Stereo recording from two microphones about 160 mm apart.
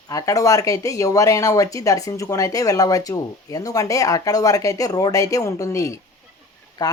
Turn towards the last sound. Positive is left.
turn(degrees=25)  # may be behind; listen again after turning